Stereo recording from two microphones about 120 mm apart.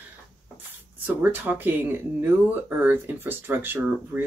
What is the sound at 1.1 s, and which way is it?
Speech, 15° right (ahead or behind).